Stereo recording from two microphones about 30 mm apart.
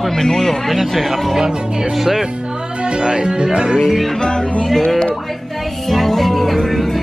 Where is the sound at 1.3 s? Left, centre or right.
Right.